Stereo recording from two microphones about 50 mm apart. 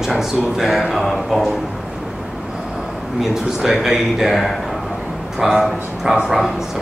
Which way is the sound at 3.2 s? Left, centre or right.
Centre.